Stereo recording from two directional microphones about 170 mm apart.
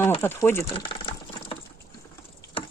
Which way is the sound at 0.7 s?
30° left (ahead or behind).